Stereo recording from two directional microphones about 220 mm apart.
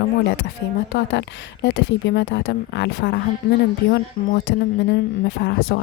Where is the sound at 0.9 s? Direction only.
50° left (ahead or behind).